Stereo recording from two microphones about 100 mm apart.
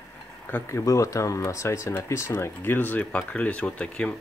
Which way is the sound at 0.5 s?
25° left (ahead or behind).